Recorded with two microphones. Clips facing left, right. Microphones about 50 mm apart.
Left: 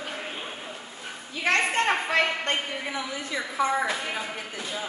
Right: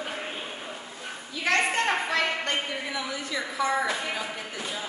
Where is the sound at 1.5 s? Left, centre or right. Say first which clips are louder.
Left 1 dB; left.